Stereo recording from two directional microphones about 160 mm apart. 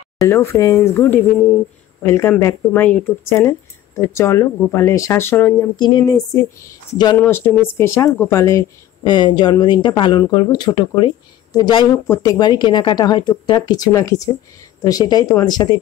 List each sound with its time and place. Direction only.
0.2 s speech: 15° left (ahead or behind)
5.8 s speech: 25° left (ahead or behind)